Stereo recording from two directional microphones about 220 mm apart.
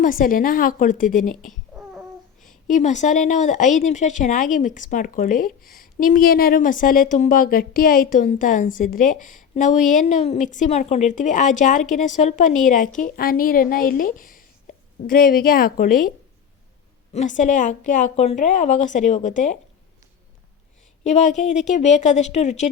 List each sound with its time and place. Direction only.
0.0 s a woman's voice: 40° left (ahead or behind)
2.6 s a woman's voice: 35° left (ahead or behind)
21.0 s a woman's voice: 30° left (ahead or behind)